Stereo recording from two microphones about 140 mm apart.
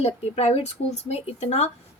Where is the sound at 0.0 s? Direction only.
50° left (ahead or behind).